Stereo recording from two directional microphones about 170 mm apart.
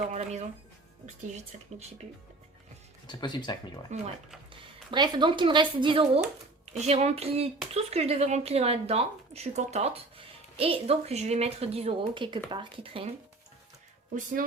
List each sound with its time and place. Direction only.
0.1 s speech: 40° right (ahead or behind)
3.1 s speech: 25° left (ahead or behind)
3.9 s speech: 40° right (ahead or behind)
4.9 s speech: 25° right (ahead or behind)